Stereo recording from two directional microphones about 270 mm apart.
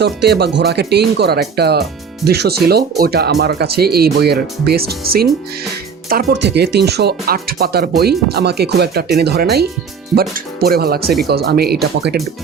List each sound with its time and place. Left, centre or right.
0.0 s speech: right